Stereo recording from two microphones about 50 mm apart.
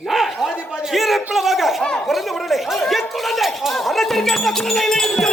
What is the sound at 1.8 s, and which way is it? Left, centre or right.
Speech, centre.